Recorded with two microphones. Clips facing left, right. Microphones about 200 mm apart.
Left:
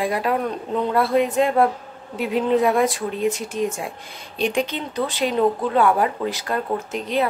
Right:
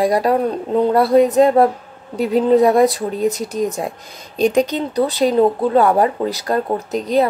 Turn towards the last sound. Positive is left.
turn(degrees=-40)  # may be behind; listen again after turning